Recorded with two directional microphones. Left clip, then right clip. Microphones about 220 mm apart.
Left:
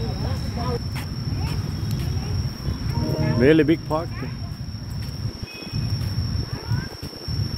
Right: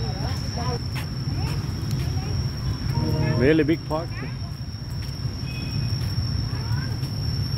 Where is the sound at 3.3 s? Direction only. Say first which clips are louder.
Left 3 dB; 15° left (ahead or behind).